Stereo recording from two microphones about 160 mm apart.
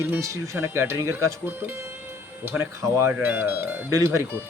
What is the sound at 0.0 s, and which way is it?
Speech, 15° right (ahead or behind).